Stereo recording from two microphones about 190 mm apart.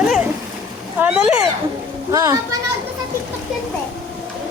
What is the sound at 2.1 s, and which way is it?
Speech, 20° right (ahead or behind).